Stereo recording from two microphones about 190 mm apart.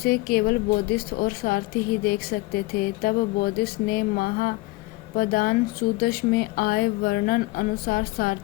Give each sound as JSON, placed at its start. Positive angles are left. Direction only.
{"t": 0.0, "sound": "speech", "side_deg": 55}